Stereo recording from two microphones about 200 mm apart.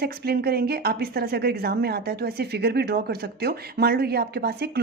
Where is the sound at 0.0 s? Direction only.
50° right (ahead or behind).